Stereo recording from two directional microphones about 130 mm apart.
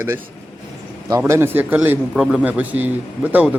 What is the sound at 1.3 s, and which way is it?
A man's voice, 20° right (ahead or behind).